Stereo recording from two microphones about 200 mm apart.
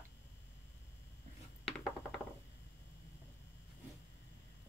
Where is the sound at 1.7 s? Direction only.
Centre (ahead or behind).